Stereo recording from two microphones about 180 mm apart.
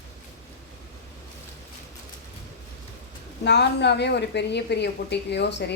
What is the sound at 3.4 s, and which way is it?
A woman's voice, 70° left (ahead or behind).